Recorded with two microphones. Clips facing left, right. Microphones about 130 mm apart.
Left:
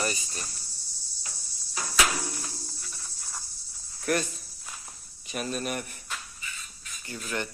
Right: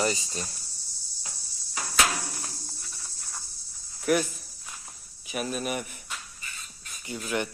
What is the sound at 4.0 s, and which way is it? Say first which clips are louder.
Speech: right 3 dB; 10° right (ahead or behind).